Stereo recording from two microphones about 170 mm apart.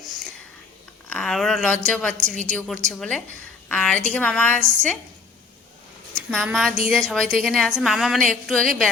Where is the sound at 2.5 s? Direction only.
5° left (ahead or behind).